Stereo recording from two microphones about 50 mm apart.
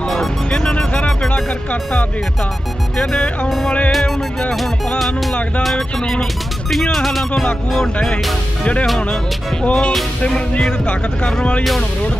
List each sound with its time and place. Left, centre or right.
0.0 s music: centre
0.5 s music: centre
0.9 s a sound: left
3.0 s speech: centre
3.4 s speech: centre
4.6 s music: centre
5.8 s speech: centre
9.7 s speech: left
11.2 s speech: centre